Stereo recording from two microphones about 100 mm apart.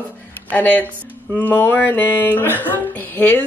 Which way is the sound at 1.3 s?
20° left (ahead or behind).